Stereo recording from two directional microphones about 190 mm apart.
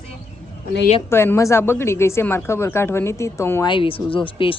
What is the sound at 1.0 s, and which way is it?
A woman's voice, 15° left (ahead or behind).